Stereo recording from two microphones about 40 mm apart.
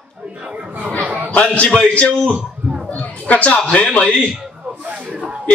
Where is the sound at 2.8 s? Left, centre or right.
Left.